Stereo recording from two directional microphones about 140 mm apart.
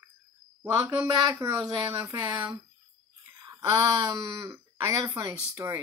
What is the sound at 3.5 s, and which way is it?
Speech, 25° right (ahead or behind).